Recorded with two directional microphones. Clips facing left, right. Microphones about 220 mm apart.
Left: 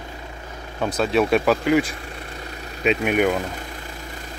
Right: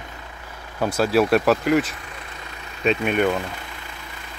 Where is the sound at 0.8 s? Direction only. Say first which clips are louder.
Right 1 dB; 5° right (ahead or behind).